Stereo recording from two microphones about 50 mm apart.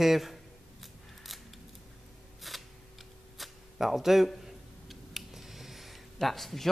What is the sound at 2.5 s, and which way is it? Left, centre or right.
Scissors, centre.